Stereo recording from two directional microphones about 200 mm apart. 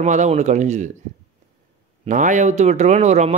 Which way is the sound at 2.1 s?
40° right (ahead or behind).